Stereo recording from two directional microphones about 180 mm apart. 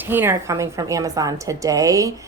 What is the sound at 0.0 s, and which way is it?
Speech, 10° right (ahead or behind).